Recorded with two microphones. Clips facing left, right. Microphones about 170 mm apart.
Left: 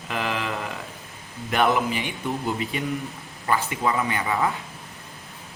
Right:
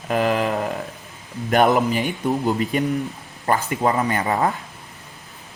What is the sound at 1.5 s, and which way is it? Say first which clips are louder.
Speech: right 5 dB; 45° right (ahead or behind).